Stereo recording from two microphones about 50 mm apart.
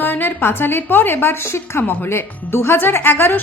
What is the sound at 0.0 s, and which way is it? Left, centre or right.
A woman's voice, left.